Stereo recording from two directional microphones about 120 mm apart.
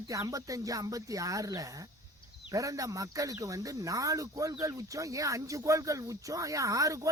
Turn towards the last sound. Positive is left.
turn(degrees=-30)  # may be behind; listen again after turning